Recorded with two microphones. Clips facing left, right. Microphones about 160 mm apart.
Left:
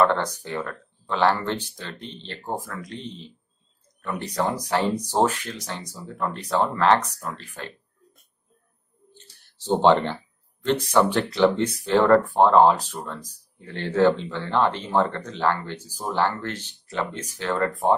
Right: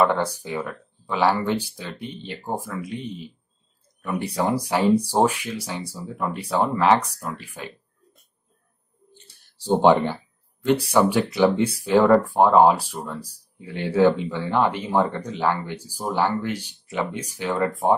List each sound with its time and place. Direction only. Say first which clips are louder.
0.0 s speech: even; 10° right (ahead or behind)
9.1 s a sound: even; 10° right (ahead or behind)
10.6 s speech: right 2 dB; 10° right (ahead or behind)